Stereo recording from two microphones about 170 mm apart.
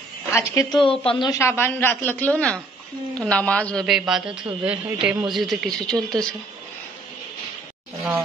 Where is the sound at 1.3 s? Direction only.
15° left (ahead or behind).